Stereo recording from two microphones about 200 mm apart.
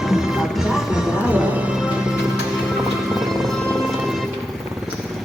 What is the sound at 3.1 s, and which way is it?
Music, centre (ahead or behind).